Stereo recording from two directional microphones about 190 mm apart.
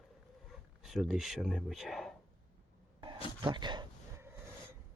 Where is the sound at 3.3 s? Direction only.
25° right (ahead or behind).